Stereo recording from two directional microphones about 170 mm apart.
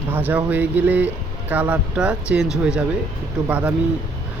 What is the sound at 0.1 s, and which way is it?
Speech, 10° right (ahead or behind).